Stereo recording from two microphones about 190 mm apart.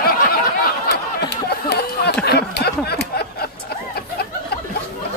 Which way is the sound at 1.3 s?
60° left (ahead or behind).